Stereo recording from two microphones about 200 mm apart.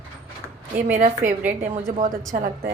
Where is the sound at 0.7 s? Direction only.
40° right (ahead or behind).